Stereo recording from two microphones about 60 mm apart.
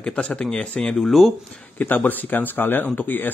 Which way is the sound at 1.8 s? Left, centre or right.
Left.